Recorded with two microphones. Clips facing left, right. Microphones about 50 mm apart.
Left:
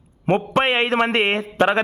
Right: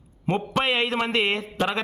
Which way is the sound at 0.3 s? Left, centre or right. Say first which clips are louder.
Left 5 dB; left.